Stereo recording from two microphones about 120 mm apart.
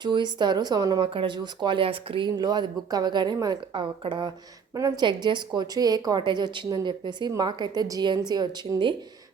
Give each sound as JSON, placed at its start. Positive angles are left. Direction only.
{"t": 0.0, "sound": "speech", "side_deg": -40}